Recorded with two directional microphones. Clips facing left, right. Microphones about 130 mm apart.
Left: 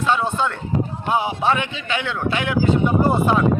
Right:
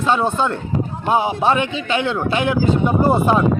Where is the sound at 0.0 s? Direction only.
30° right (ahead or behind).